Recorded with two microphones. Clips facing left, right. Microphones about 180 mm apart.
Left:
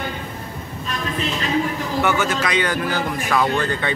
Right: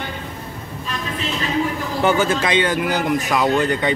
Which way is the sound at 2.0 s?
30° right (ahead or behind).